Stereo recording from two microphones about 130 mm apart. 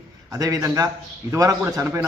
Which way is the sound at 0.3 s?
25° right (ahead or behind).